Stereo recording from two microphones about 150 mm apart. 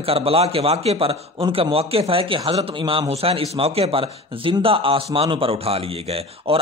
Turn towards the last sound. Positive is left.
turn(degrees=-40)  # may be behind; listen again after turning